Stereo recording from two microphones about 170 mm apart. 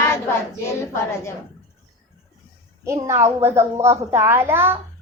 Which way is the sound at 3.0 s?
15° right (ahead or behind).